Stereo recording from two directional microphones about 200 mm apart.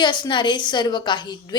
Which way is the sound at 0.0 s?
20° left (ahead or behind).